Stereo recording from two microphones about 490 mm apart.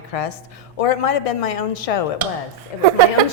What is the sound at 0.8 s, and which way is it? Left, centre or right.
A woman's voice, left.